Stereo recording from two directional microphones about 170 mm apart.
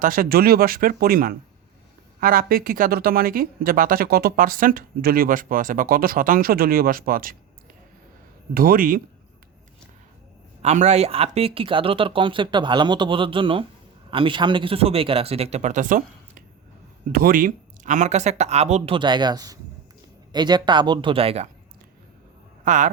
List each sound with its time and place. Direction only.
0.0 s speech: 55° right (ahead or behind)
8.5 s speech: 55° right (ahead or behind)
10.6 s speech: 40° right (ahead or behind)
17.1 s speech: 60° right (ahead or behind); by 21.5 s 35° right (ahead or behind)
22.6 s speech: 45° right (ahead or behind)